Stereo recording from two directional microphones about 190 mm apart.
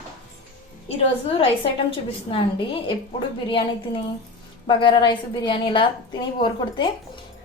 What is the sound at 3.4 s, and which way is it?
A woman's voice, 25° left (ahead or behind).